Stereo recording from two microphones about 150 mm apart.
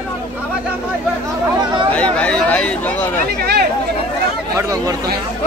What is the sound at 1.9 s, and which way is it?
Speech, 10° left (ahead or behind).